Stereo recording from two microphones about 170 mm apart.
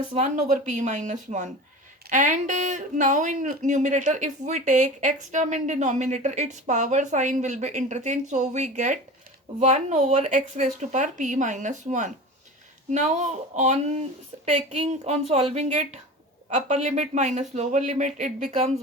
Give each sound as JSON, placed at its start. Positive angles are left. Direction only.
{"t": 0.2, "sound": "speech", "side_deg": -45}